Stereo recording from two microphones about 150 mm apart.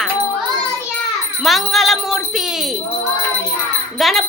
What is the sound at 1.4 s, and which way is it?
Speech, centre (ahead or behind).